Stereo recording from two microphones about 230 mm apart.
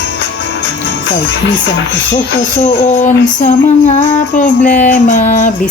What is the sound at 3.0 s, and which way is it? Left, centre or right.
Music, left.